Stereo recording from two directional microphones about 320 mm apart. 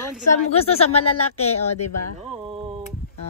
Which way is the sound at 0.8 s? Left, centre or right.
Left.